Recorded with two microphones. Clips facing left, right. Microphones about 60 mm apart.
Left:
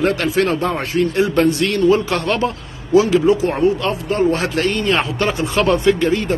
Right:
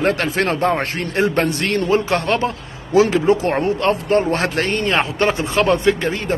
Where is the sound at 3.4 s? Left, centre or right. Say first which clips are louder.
Left 1 dB; right.